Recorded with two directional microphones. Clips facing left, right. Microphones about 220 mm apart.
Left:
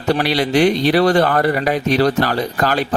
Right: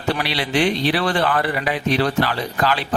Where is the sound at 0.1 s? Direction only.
45° left (ahead or behind).